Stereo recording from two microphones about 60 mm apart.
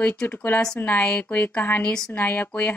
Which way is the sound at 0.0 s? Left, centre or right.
Left.